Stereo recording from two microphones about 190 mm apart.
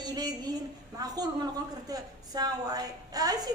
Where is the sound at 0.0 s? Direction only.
20° right (ahead or behind).